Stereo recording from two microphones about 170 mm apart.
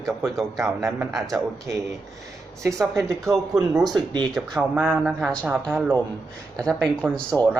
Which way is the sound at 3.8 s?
25° right (ahead or behind).